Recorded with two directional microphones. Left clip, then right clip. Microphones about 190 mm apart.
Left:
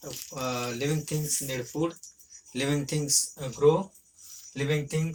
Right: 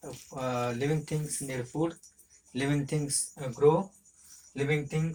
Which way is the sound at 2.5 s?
25° right (ahead or behind).